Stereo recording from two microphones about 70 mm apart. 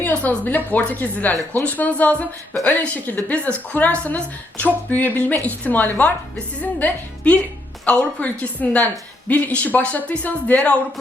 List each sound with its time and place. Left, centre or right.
0.0 s a woman's voice: left